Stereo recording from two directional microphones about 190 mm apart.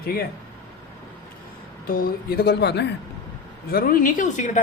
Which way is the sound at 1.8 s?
50° left (ahead or behind).